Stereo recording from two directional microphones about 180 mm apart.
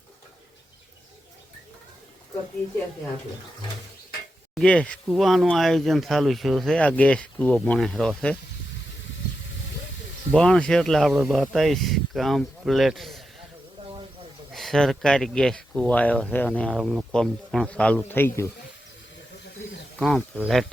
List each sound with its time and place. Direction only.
4.5 s speech: 5° left (ahead or behind)
10.3 s speech: 5° left (ahead or behind)
13.8 s snake: 30° right (ahead or behind)
14.5 s speech: centre (ahead or behind)
20.0 s speech: centre (ahead or behind)